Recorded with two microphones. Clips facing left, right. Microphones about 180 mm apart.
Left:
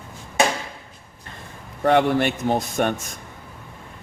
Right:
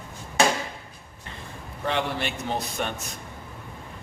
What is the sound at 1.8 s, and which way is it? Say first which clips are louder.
Speech: left 10 dB; 55° left (ahead or behind).